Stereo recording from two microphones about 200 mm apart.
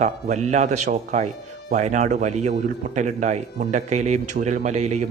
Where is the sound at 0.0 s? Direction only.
35° right (ahead or behind).